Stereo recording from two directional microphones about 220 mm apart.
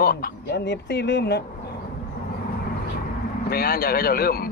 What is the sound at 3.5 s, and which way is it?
Speech, 45° left (ahead or behind).